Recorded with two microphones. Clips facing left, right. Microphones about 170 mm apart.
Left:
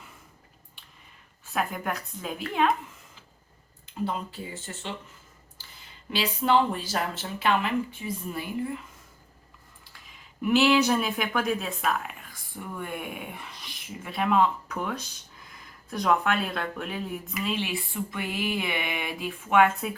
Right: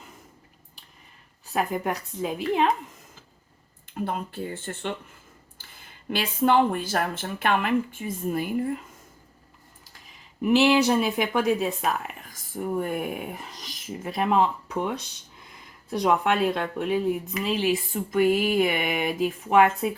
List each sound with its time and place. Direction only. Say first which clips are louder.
1.5 s speech: right 4 dB; 25° right (ahead or behind)
3.9 s speech: right 1 dB; 55° right (ahead or behind)
10.4 s speech: right 2 dB; 20° right (ahead or behind)
12.3 s speech: right 15 dB; 40° right (ahead or behind); by 17.0 s 25° right (ahead or behind)
17.5 s speech: right 9 dB; 40° right (ahead or behind)